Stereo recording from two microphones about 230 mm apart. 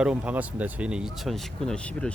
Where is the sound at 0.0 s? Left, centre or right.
Centre.